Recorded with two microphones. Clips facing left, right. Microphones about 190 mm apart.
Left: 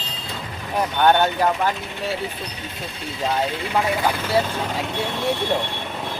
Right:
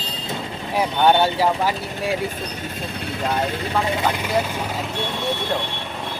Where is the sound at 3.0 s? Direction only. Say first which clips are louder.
Even; 60° right (ahead or behind).